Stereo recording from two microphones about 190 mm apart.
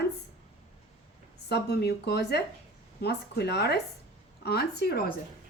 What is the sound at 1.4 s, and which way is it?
Speech, 60° left (ahead or behind).